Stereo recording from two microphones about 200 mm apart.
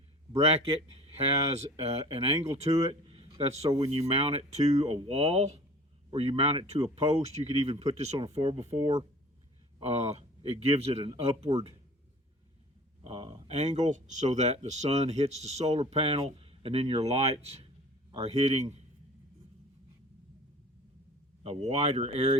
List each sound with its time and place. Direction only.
0.3 s speech: 30° right (ahead or behind)
13.1 s speech: 25° right (ahead or behind)
21.4 s speech: 30° right (ahead or behind)